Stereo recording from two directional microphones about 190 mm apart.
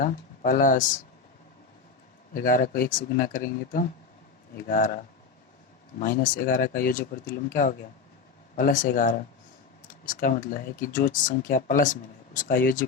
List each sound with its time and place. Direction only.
0.0 s speech: 45° left (ahead or behind)
2.3 s speech: 50° left (ahead or behind)
6.0 s speech: 45° left (ahead or behind)
8.5 s speech: 45° left (ahead or behind)